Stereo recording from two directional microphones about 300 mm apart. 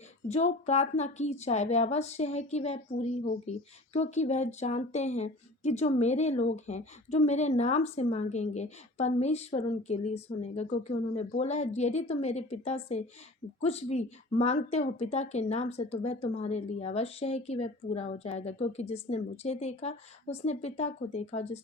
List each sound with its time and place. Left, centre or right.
0.3 s speech: left